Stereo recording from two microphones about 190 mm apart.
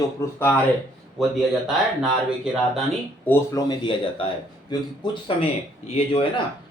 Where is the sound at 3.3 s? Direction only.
20° left (ahead or behind).